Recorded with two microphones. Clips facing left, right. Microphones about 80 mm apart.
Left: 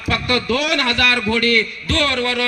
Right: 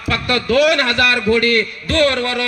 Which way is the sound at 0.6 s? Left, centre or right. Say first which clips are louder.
Right 3 dB; right.